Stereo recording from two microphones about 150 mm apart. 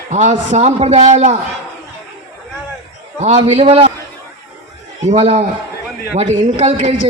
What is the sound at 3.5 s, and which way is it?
Speech, 45° right (ahead or behind).